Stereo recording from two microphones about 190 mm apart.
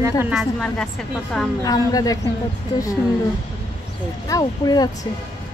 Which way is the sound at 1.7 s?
20° left (ahead or behind).